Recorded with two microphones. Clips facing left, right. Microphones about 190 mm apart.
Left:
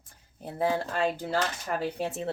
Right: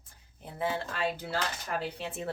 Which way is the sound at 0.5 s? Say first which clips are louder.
Left 5 dB; 40° left (ahead or behind).